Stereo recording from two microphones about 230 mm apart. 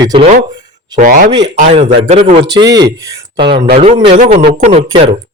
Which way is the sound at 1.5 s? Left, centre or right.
Right.